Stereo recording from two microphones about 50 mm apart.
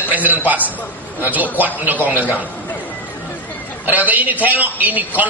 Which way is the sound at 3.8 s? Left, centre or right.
Right.